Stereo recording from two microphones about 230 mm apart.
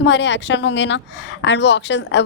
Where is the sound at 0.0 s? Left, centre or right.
Left.